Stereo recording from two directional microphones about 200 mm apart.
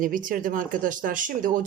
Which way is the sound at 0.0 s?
40° right (ahead or behind).